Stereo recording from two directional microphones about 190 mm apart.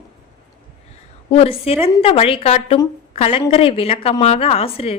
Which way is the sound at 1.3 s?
30° left (ahead or behind).